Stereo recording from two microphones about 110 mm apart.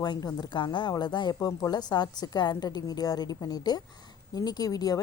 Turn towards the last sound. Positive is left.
turn(degrees=35)  # may be behind; listen again after turning